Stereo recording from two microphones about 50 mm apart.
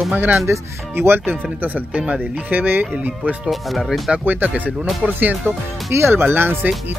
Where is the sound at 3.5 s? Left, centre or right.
Centre.